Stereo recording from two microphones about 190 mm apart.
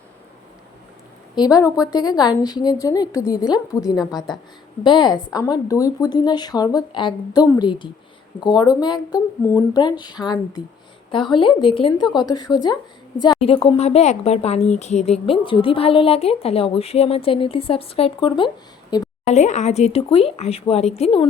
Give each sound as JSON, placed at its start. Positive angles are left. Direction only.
{"t": 1.4, "sound": "a woman's voice", "side_deg": 20}
{"t": 19.2, "sound": "speech", "side_deg": 35}